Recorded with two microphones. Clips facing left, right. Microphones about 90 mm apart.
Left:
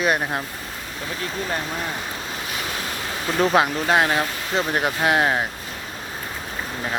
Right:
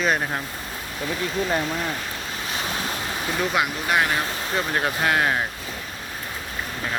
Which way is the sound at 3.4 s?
35° left (ahead or behind).